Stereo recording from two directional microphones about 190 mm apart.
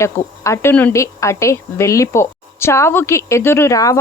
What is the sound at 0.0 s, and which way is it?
Speech, 15° left (ahead or behind).